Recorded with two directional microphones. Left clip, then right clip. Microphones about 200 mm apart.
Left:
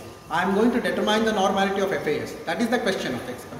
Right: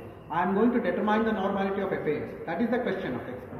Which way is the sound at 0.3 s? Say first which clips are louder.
Left 4 dB; 15° left (ahead or behind).